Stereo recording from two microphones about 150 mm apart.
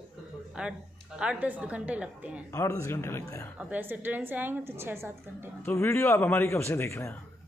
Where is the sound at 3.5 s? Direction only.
10° right (ahead or behind).